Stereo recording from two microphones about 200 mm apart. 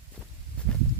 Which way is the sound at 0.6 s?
5° left (ahead or behind).